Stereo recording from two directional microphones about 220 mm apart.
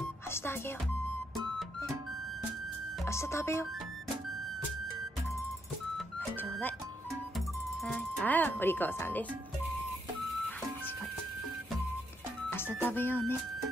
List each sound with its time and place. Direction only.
0.3 s speech: 10° left (ahead or behind)
3.1 s speech: 10° left (ahead or behind)
5.9 s music: 10° left (ahead or behind)
12.4 s speech: 10° left (ahead or behind)